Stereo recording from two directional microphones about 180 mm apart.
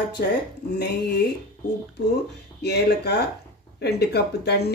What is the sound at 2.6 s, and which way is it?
Speech, 65° left (ahead or behind).